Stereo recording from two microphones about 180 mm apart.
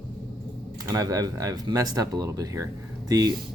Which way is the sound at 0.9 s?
20° right (ahead or behind).